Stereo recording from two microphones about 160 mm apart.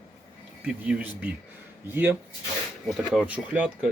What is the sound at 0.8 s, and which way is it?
Speech, 10° right (ahead or behind).